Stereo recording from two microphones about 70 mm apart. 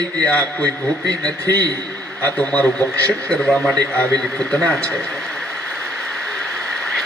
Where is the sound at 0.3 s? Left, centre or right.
Centre.